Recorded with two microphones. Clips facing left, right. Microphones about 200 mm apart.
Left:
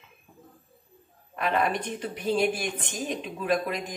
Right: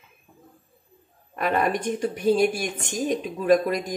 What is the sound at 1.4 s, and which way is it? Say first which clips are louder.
A woman's voice: right 3 dB; 45° right (ahead or behind).